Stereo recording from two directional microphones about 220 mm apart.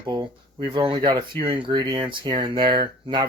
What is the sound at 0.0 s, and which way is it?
Speech, 15° right (ahead or behind).